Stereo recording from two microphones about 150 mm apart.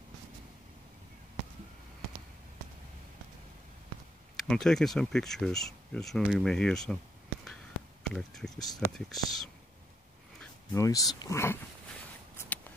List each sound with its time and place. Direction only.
4.4 s speech: 5° left (ahead or behind)
8.1 s speech: 5° left (ahead or behind)
10.7 s speech: 20° left (ahead or behind)
12.4 s a sound: 10° left (ahead or behind)